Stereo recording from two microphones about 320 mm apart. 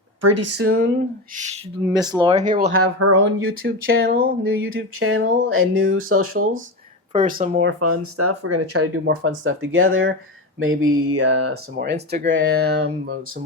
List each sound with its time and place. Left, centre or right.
0.2 s a sound: right
1.8 s speech: centre
2.2 s speech: right
2.8 s a sound: right
3.6 s speech: right
4.4 s speech: right
7.1 s speech: right
7.8 s speech: right
10.6 s a sound: right
11.9 s speech: right